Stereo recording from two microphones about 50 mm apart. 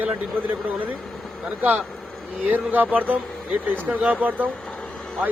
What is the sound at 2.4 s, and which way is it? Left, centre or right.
Speech, right.